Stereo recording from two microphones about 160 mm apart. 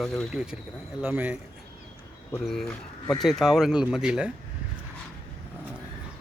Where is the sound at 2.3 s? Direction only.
Centre (ahead or behind).